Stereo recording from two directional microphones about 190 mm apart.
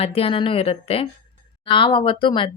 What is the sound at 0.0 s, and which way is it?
A woman's voice, 30° left (ahead or behind).